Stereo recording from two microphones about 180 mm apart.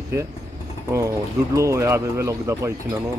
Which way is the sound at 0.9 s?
15° right (ahead or behind).